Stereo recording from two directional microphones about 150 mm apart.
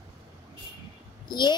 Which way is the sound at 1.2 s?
30° left (ahead or behind).